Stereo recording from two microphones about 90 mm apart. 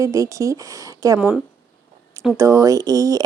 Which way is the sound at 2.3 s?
35° right (ahead or behind).